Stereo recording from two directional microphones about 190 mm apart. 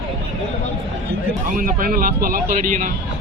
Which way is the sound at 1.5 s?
45° right (ahead or behind).